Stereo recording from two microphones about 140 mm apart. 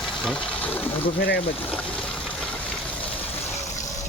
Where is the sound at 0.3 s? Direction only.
10° left (ahead or behind).